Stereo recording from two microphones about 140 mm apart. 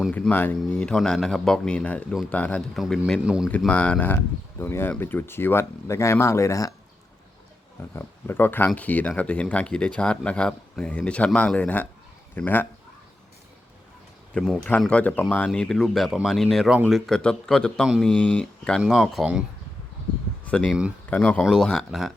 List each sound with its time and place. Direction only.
0.1 s speech: 10° left (ahead or behind)
2.7 s speech: centre (ahead or behind)
3.7 s speech: 10° left (ahead or behind)
7.9 s speech: 15° left (ahead or behind)
14.3 s speech: 5° left (ahead or behind)
16.7 s speech: 10° right (ahead or behind)
17.1 s speech: 5° left (ahead or behind)
20.4 s speech: 10° left (ahead or behind)